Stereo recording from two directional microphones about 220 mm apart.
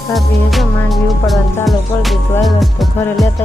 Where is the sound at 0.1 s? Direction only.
Centre (ahead or behind).